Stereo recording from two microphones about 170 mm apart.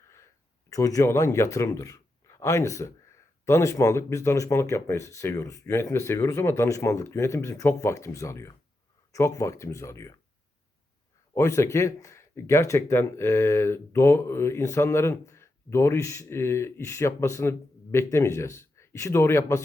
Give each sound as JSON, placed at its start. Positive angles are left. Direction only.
{"t": 0.7, "sound": "a man's voice", "side_deg": 20}
{"t": 11.3, "sound": "speech", "side_deg": 15}